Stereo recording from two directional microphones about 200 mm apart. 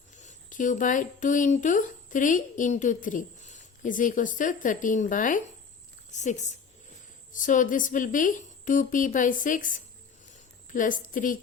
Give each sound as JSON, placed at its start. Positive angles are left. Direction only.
{"t": 0.2, "sound": "a woman's voice", "side_deg": 40}